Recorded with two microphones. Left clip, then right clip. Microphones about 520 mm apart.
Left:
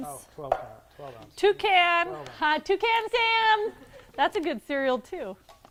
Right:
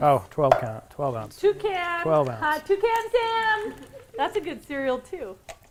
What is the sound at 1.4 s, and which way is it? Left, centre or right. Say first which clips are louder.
A woman's voice: left 3 dB; left.